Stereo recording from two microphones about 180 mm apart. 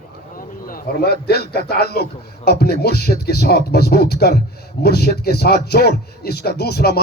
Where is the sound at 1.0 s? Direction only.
65° left (ahead or behind).